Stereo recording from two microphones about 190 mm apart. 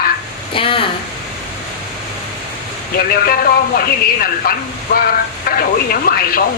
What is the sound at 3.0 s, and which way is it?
Speech, 50° left (ahead or behind).